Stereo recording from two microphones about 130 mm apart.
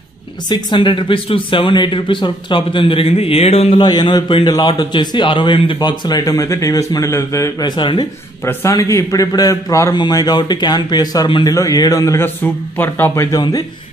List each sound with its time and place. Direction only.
0.5 s a man's voice: 35° left (ahead or behind); by 3.8 s 50° left (ahead or behind)
3.8 s a man's voice: 35° left (ahead or behind)
7.7 s a man's voice: 35° left (ahead or behind)
8.5 s a man's voice: 25° left (ahead or behind)
13.4 s a man's voice: 30° left (ahead or behind)